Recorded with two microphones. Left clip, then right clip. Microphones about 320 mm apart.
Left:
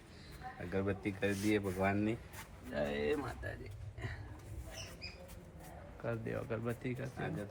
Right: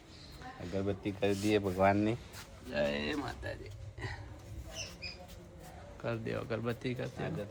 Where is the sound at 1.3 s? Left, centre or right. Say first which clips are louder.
Right 5 dB; right.